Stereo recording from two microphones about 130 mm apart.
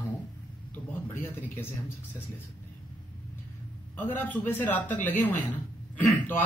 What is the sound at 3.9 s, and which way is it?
A man's voice, 15° left (ahead or behind).